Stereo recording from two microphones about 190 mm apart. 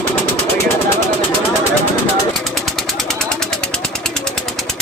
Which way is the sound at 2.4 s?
Centre (ahead or behind).